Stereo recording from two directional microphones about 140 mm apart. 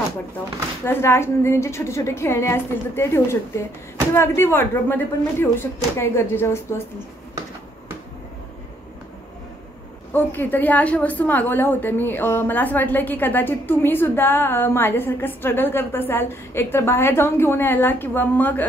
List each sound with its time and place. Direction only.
0.8 s a woman's voice: 20° left (ahead or behind)
10.1 s a woman's voice: 15° left (ahead or behind)